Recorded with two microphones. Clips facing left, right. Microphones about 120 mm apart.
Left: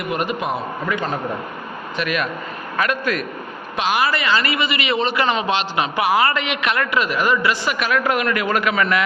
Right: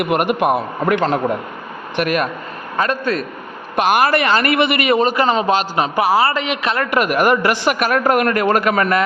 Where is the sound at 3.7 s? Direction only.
55° right (ahead or behind); by 6.9 s 35° right (ahead or behind).